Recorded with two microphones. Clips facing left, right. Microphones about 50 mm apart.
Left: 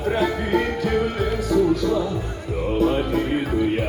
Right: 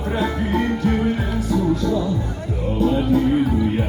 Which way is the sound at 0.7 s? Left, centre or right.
Left.